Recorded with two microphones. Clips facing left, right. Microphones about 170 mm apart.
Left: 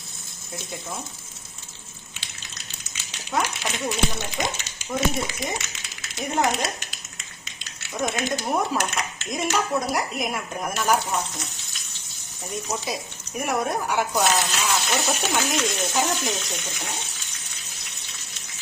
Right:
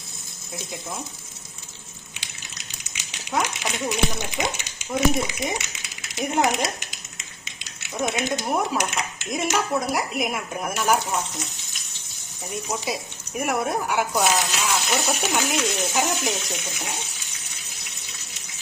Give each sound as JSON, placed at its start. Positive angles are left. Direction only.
{"t": 2.2, "sound": "a sound", "side_deg": -15}
{"t": 4.4, "sound": "speech", "side_deg": -15}
{"t": 7.6, "sound": "a sound", "side_deg": -15}
{"t": 8.4, "sound": "speech", "side_deg": -5}
{"t": 9.7, "sound": "speech", "side_deg": -5}
{"t": 12.5, "sound": "speech", "side_deg": -15}